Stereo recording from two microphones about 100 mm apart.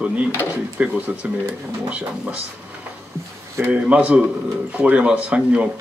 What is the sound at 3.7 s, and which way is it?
Speech, 15° right (ahead or behind).